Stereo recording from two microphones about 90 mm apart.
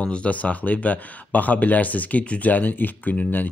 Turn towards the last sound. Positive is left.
turn(degrees=20)  # may be behind; listen again after turning